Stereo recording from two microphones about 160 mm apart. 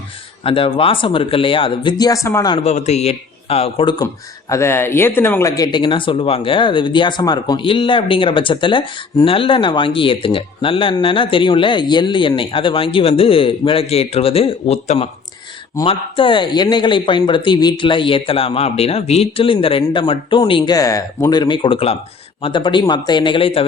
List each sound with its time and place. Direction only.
0.4 s a man's voice: 35° left (ahead or behind)
2.6 s a man's voice: 45° left (ahead or behind)